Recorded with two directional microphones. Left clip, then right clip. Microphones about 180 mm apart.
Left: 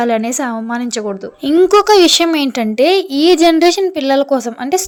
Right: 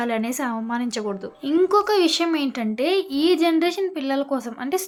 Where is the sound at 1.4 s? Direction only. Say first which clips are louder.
Left 9 dB; 45° left (ahead or behind).